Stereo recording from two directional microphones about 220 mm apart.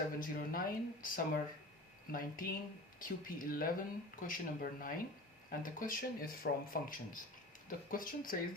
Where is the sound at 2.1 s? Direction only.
40° left (ahead or behind).